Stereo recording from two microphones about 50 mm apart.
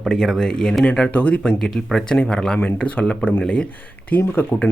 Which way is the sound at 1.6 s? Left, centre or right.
Centre.